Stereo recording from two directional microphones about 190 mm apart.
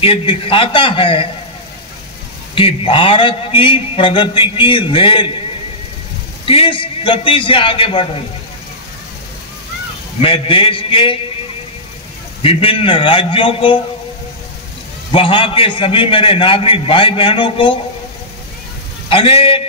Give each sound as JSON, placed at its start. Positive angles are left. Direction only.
{"t": 0.0, "sound": "a man's voice", "side_deg": 25}
{"t": 2.5, "sound": "a man's voice", "side_deg": 30}
{"t": 6.4, "sound": "a man's voice", "side_deg": 30}
{"t": 10.2, "sound": "a man's voice", "side_deg": 30}
{"t": 12.4, "sound": "a man's voice", "side_deg": 30}
{"t": 15.1, "sound": "a man's voice", "side_deg": 25}
{"t": 19.0, "sound": "a man's voice", "side_deg": 30}